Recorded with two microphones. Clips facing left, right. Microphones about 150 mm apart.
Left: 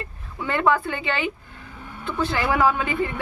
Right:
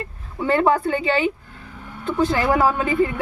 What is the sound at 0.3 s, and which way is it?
A woman's voice, 35° right (ahead or behind).